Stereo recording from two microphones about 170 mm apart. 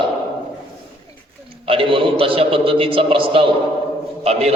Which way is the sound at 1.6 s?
30° right (ahead or behind).